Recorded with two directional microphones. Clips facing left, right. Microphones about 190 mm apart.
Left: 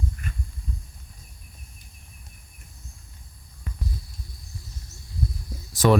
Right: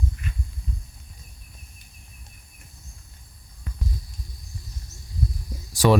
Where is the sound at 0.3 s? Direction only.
50° left (ahead or behind).